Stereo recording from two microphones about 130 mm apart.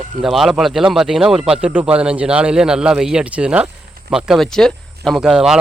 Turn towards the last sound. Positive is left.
turn(degrees=-5)  # may be behind; listen again after turning